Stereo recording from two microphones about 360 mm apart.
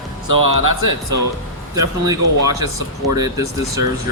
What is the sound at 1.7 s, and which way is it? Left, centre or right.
Speech, centre.